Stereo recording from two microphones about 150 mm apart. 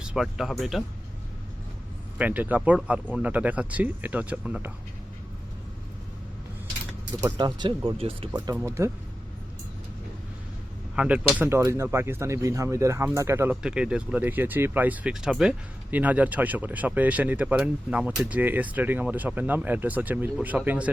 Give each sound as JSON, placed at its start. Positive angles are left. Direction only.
{"t": 0.0, "sound": "speech", "side_deg": -5}
{"t": 2.1, "sound": "speech", "side_deg": -10}
{"t": 7.3, "sound": "speech", "side_deg": -30}
{"t": 8.5, "sound": "speech", "side_deg": -20}
{"t": 10.9, "sound": "speech", "side_deg": -5}
{"t": 13.6, "sound": "speech", "side_deg": -5}